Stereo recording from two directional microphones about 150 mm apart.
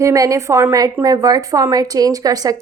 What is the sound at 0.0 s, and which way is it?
A woman's voice, 20° right (ahead or behind).